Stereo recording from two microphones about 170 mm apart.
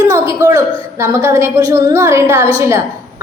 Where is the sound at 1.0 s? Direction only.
15° right (ahead or behind).